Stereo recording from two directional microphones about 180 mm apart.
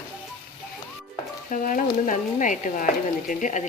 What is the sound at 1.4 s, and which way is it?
Speech, 45° left (ahead or behind).